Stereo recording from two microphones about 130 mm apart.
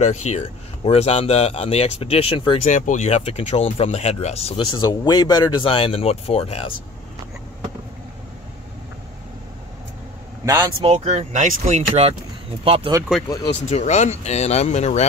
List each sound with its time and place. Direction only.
0.0 s speech: 60° left (ahead or behind); by 2.6 s 40° left (ahead or behind)
2.6 s speech: 75° left (ahead or behind); by 4.6 s 55° left (ahead or behind)
4.6 s speech: 35° left (ahead or behind)
10.4 s speech: 25° right (ahead or behind)
10.8 s speech: 50° right (ahead or behind)
13.6 s speech: 60° left (ahead or behind)